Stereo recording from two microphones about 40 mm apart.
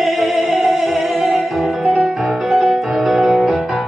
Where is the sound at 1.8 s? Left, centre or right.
Right.